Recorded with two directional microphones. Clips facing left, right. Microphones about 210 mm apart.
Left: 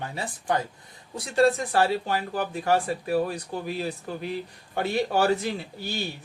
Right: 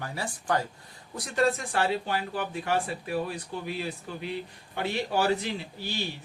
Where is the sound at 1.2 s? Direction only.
35° left (ahead or behind).